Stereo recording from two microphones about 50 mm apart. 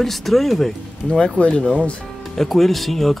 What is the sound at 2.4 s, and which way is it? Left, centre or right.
Speech, centre.